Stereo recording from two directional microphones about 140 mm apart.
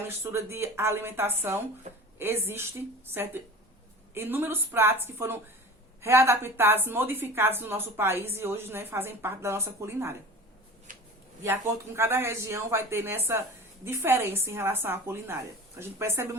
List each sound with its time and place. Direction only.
0.1 s a woman's voice: 20° right (ahead or behind)
10.9 s a sound: 70° right (ahead or behind)
11.9 s a woman's voice: 15° right (ahead or behind)